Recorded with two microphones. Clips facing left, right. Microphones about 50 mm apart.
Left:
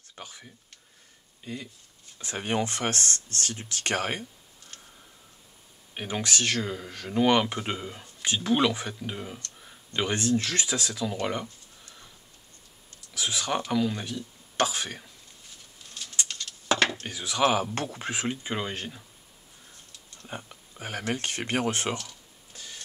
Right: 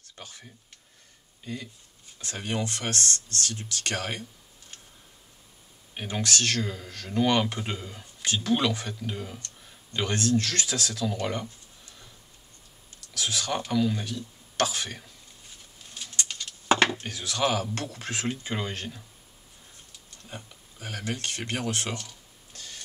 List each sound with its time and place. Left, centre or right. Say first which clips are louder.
0.1 s speech: left 1 dB; centre
2.3 s speech: left 3 dB; left
5.9 s speech: even; centre
13.1 s speech: left 1 dB; centre
16.3 s a sound: right 3 dB; centre
17.1 s speech: left 3 dB; centre
20.2 s speech: left 4 dB; left
21.9 s cash register: left 2 dB; centre